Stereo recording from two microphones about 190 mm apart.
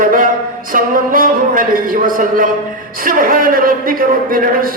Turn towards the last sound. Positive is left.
turn(degrees=-50)  # may be behind; listen again after turning